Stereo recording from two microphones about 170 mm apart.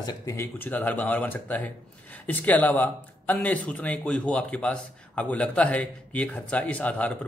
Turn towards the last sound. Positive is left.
turn(degrees=10)  # may be behind; listen again after turning